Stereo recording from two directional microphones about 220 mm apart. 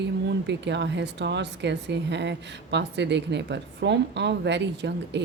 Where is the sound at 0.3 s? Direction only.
50° right (ahead or behind).